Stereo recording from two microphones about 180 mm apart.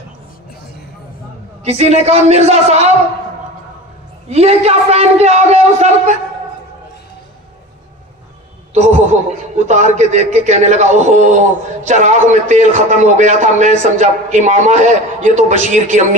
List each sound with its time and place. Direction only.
1.6 s a man's voice: 35° right (ahead or behind)
4.3 s a man's voice: 35° right (ahead or behind)
8.7 s a man's voice: 40° right (ahead or behind)